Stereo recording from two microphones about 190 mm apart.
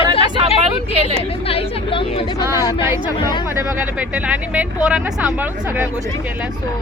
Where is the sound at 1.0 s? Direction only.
30° left (ahead or behind).